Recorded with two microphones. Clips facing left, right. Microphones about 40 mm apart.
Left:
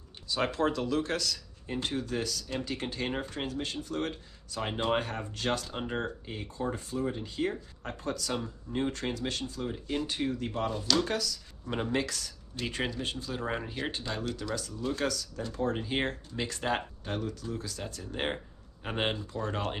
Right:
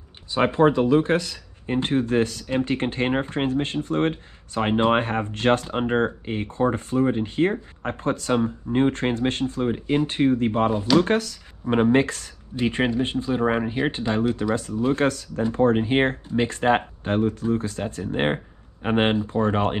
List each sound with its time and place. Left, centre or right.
0.3 s speech: right